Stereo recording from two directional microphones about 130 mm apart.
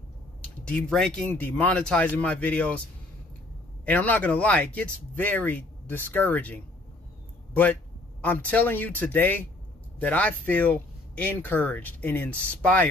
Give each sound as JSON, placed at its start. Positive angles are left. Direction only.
{"t": 0.4, "sound": "speech", "side_deg": 10}
{"t": 3.8, "sound": "speech", "side_deg": 10}